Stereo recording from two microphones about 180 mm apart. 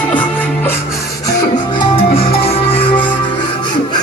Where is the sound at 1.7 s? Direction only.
30° left (ahead or behind).